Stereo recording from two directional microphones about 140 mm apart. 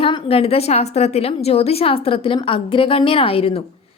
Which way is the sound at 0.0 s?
45° left (ahead or behind).